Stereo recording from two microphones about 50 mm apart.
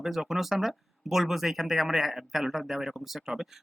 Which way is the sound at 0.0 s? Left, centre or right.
Centre.